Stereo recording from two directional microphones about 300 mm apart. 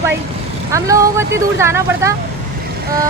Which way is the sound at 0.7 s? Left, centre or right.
Centre.